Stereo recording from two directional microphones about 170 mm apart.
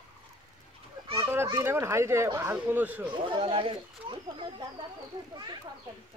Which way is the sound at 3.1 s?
30° right (ahead or behind).